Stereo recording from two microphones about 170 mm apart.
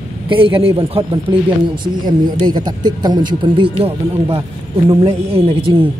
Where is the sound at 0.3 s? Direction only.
30° right (ahead or behind).